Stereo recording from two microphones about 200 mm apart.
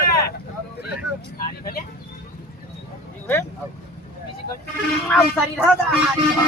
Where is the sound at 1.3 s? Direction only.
45° left (ahead or behind).